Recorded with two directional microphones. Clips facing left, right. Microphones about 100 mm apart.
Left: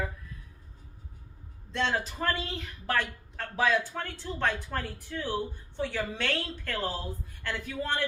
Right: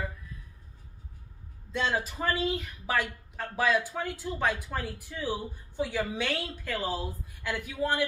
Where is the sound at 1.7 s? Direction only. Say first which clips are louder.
Even; 5° right (ahead or behind).